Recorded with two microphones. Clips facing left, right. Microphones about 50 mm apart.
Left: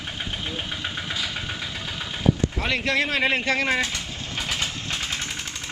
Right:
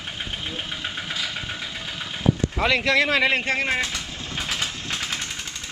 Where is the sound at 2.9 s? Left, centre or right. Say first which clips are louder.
Even; right.